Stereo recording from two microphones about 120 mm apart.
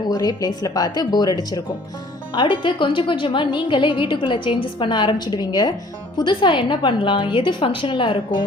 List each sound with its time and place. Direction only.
0.1 s a woman's voice: 35° left (ahead or behind)